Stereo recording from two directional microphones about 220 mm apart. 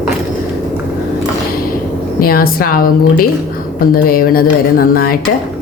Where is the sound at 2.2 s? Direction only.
40° left (ahead or behind).